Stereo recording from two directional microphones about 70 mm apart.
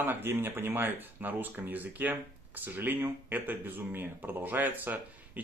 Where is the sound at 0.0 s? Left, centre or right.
Right.